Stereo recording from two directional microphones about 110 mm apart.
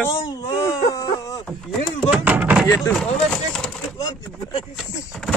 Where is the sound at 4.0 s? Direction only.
35° left (ahead or behind).